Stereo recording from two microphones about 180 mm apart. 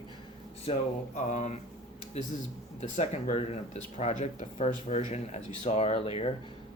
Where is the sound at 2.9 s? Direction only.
40° left (ahead or behind).